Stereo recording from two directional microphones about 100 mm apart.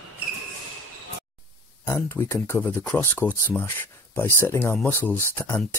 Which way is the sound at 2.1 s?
25° left (ahead or behind).